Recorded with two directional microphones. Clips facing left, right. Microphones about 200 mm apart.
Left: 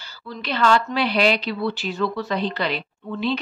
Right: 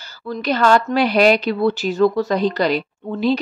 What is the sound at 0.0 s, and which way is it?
A woman's voice, 45° right (ahead or behind).